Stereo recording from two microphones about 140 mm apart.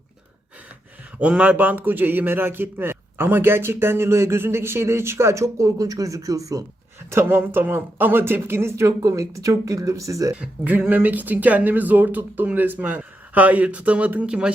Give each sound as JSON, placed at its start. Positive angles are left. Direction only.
{"t": 1.2, "sound": "a man's voice", "side_deg": -10}
{"t": 10.3, "sound": "a man's voice", "side_deg": -10}